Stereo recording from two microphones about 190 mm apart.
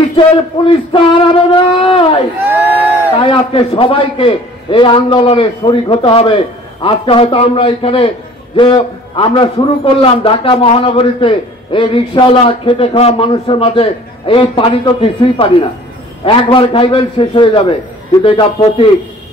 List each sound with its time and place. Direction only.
0.9 s a man's voice: 25° left (ahead or behind)
2.4 s crowd: 10° right (ahead or behind)
3.2 s a man's voice: 30° left (ahead or behind)